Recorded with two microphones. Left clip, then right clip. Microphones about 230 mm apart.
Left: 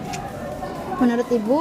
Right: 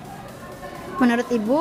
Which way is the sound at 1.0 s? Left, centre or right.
Right.